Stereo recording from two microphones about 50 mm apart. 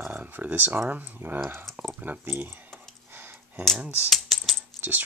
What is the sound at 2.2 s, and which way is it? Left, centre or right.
Speech, right.